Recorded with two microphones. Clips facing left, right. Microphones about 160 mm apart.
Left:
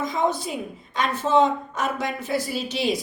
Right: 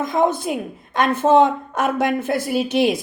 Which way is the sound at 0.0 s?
55° right (ahead or behind).